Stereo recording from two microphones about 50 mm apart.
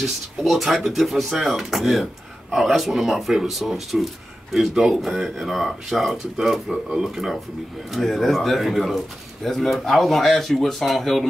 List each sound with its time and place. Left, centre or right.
0.0 s speech: centre